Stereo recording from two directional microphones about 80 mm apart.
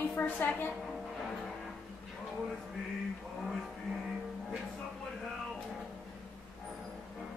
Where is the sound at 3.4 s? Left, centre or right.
Centre.